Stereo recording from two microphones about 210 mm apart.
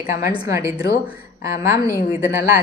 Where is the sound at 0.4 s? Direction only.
15° right (ahead or behind).